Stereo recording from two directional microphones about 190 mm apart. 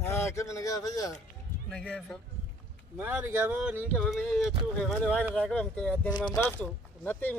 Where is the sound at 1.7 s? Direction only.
5° left (ahead or behind).